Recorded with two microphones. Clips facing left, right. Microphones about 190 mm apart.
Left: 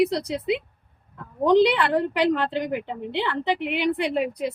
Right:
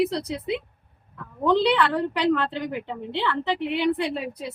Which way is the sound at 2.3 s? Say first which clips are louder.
Even; 15° left (ahead or behind).